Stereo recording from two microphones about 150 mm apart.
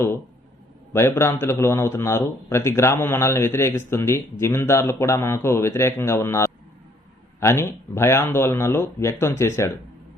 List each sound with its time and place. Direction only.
0.9 s speech: 15° left (ahead or behind)